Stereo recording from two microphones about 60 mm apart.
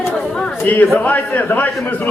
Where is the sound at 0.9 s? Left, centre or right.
Left.